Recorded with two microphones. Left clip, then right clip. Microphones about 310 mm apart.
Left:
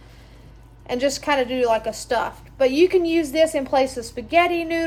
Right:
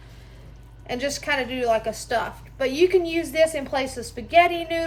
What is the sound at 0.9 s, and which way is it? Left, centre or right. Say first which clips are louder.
A woman's voice: left 4 dB; centre.